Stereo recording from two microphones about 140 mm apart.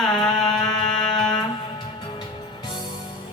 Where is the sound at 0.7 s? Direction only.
30° left (ahead or behind).